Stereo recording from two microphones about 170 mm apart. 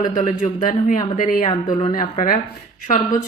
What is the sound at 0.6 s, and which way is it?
Speech, 55° left (ahead or behind).